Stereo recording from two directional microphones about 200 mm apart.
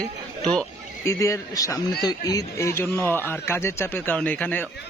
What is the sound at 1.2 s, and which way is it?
A man's voice, 15° left (ahead or behind).